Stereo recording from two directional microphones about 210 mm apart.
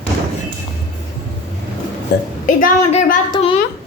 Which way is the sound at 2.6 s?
40° left (ahead or behind).